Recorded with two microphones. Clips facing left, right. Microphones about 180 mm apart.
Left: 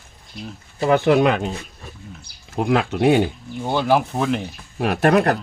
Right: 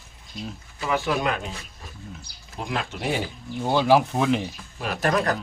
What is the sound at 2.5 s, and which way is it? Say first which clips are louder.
Speech: left 10 dB; 60° left (ahead or behind).